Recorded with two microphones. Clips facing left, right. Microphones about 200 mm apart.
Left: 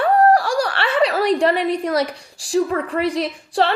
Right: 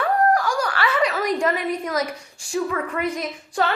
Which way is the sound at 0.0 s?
30° left (ahead or behind).